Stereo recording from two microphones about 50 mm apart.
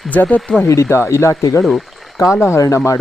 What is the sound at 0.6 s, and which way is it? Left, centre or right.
Speech, left.